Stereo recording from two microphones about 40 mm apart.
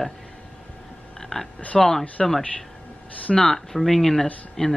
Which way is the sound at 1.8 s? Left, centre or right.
Centre.